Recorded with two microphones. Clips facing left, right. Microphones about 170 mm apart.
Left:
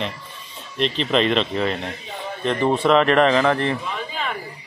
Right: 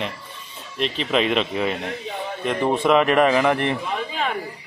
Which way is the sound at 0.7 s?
5° right (ahead or behind).